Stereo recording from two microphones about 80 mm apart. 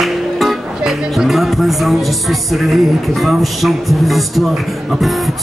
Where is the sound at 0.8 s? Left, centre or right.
Centre.